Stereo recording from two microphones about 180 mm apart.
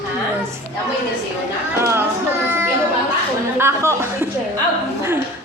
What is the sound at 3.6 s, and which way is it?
Chuckle, 15° right (ahead or behind).